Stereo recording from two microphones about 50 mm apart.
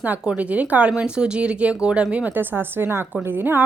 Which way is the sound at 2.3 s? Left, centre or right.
Right.